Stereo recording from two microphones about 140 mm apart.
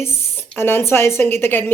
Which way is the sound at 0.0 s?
15° left (ahead or behind).